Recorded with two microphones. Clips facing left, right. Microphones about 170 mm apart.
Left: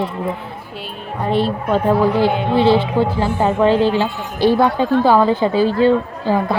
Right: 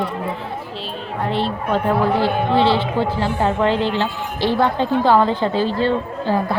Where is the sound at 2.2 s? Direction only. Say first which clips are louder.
Left 2 dB; 15° left (ahead or behind).